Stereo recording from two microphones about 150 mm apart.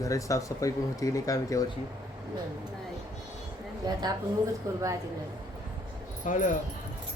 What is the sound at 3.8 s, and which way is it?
Speech, 30° right (ahead or behind).